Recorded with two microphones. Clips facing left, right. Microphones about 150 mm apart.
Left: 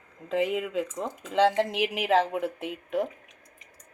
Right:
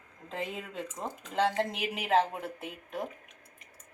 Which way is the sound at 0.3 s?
90° left.